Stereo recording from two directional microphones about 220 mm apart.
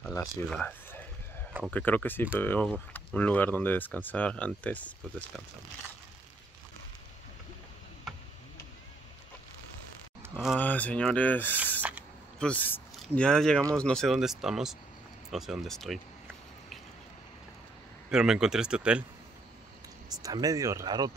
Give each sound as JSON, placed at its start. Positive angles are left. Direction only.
{"t": 0.0, "sound": "a sound", "side_deg": 15}
{"t": 0.5, "sound": "speech", "side_deg": 5}
{"t": 10.4, "sound": "speech", "side_deg": 5}
{"t": 15.2, "sound": "a sound", "side_deg": 0}
{"t": 18.1, "sound": "speech", "side_deg": -5}
{"t": 20.1, "sound": "speech", "side_deg": -15}